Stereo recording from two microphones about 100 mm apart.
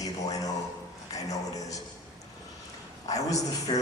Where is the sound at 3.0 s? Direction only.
35° left (ahead or behind).